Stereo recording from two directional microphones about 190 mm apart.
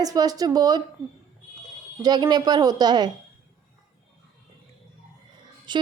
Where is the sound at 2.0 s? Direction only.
20° right (ahead or behind).